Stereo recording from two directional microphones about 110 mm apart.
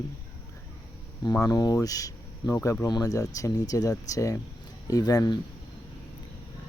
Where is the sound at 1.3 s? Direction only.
35° left (ahead or behind).